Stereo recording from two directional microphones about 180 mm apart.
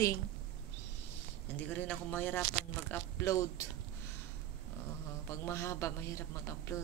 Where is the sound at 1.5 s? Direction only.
10° left (ahead or behind).